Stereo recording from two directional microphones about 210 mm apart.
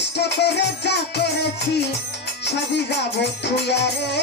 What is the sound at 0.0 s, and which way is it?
Music, 55° left (ahead or behind).